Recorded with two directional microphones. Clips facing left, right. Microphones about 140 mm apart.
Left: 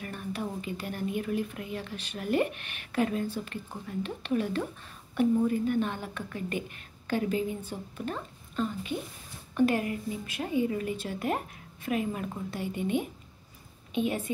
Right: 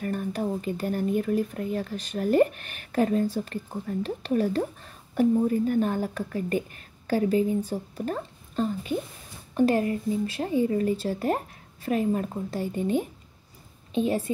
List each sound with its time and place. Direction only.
0.0 s speech: 45° right (ahead or behind)